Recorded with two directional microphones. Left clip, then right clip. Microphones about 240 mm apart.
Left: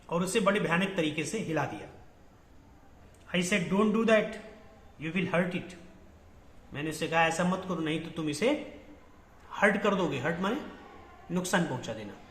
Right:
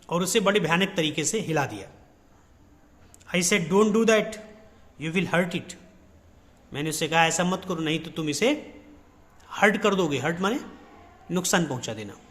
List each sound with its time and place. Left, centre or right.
0.1 s a man's voice: right
3.2 s a man's voice: right
6.7 s a man's voice: right